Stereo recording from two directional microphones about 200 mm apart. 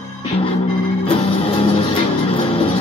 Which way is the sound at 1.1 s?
30° left (ahead or behind).